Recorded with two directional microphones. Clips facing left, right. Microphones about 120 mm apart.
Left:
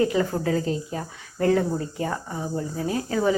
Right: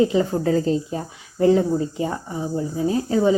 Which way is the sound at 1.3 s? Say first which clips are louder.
Right 5 dB; 20° right (ahead or behind).